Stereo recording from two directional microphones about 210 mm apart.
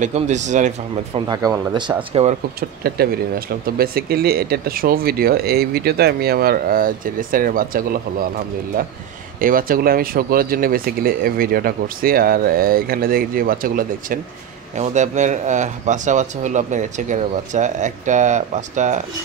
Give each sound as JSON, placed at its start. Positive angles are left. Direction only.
{"t": 0.0, "sound": "speech", "side_deg": -35}
{"t": 1.3, "sound": "speech", "side_deg": -15}
{"t": 2.8, "sound": "speech", "side_deg": -45}
{"t": 9.4, "sound": "speech", "side_deg": -40}